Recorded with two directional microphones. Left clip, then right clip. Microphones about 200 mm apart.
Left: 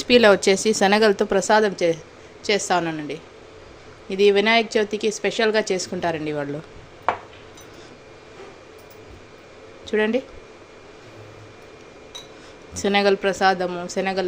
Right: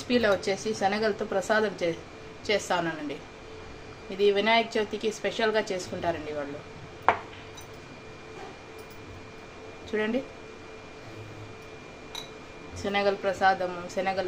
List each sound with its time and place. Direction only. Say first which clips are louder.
0.0 s a woman's voice: left 10 dB; 50° left (ahead or behind)
9.9 s a woman's voice: left 8 dB; 50° left (ahead or behind)
12.8 s a woman's voice: left 8 dB; 55° left (ahead or behind)